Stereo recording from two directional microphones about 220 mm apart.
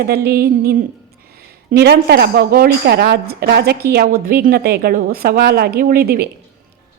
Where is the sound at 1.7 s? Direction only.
45° right (ahead or behind).